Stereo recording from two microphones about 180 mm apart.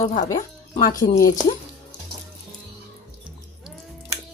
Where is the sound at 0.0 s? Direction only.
40° left (ahead or behind).